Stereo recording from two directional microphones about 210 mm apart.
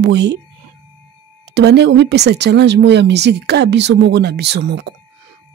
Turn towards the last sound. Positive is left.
turn(degrees=-55)  # may be behind; listen again after turning